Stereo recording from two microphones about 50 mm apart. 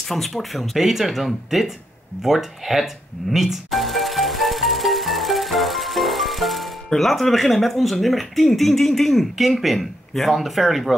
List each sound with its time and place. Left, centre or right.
0.0 s speech: centre
2.2 s music: centre
6.9 s speech: centre